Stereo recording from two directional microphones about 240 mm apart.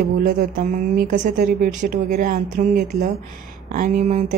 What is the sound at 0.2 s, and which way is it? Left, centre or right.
Speech, right.